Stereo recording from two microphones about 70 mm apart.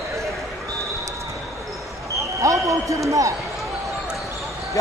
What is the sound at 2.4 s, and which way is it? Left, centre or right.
Speech, right.